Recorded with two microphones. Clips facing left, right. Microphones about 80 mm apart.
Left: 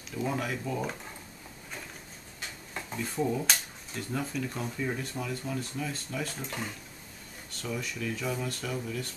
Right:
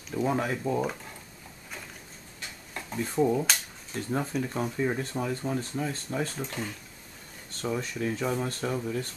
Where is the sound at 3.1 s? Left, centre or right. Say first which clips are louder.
Right 5 dB; centre.